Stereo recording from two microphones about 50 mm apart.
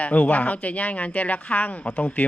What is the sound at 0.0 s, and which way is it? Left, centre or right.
Speech, left.